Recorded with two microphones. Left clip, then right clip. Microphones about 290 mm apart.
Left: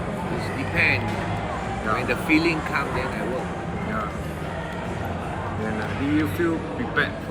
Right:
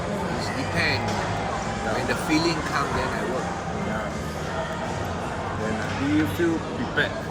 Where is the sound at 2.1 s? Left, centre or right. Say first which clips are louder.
Left 3 dB; centre.